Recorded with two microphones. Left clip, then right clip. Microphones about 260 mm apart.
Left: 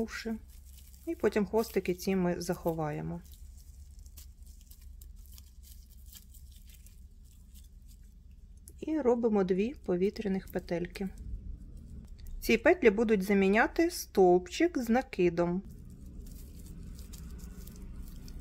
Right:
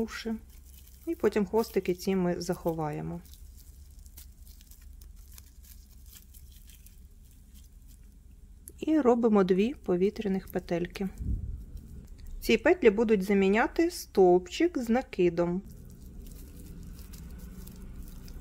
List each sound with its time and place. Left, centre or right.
0.0 s speech: centre
8.6 s speech: centre